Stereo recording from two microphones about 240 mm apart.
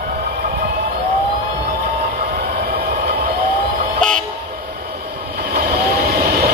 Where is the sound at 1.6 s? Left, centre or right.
Right.